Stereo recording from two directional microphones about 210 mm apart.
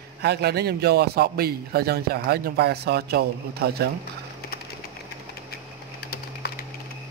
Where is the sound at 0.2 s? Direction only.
50° right (ahead or behind).